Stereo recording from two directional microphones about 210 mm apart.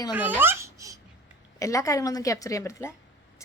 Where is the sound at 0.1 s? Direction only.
10° right (ahead or behind).